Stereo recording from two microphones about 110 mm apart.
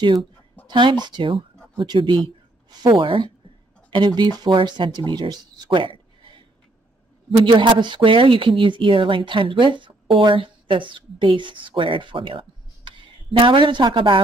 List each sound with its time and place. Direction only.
0.7 s speech: 45° right (ahead or behind)